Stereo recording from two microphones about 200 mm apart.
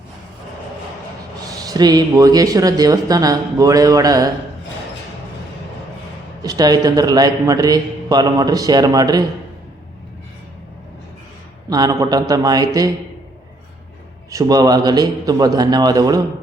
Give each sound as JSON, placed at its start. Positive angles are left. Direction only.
{"t": 1.6, "sound": "speech", "side_deg": -20}
{"t": 6.4, "sound": "a man's voice", "side_deg": -20}
{"t": 11.7, "sound": "a man's voice", "side_deg": -20}
{"t": 14.3, "sound": "a man's voice", "side_deg": -15}